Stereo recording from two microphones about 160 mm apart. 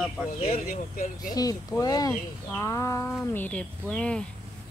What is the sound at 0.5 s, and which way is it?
Speech, 60° left (ahead or behind).